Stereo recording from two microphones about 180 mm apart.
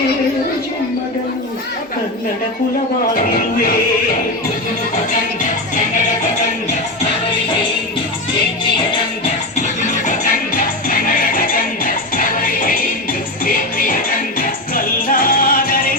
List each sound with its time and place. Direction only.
9.8 s music: 45° left (ahead or behind)